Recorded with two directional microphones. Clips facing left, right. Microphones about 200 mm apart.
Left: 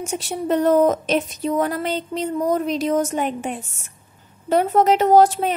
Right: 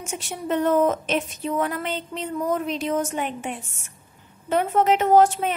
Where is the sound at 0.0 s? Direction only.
35° left (ahead or behind).